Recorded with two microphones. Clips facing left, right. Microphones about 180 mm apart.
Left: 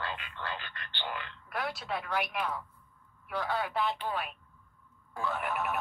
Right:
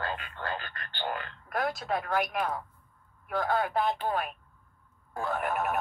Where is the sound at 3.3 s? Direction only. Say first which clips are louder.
Right 5 dB; 45° right (ahead or behind).